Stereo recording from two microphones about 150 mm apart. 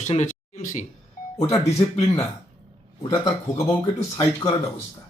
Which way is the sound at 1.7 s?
40° left (ahead or behind).